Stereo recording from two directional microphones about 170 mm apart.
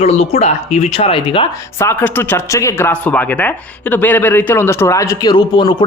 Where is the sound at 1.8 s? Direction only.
15° left (ahead or behind).